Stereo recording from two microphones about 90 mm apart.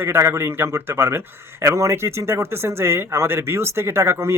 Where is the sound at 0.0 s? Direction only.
25° right (ahead or behind).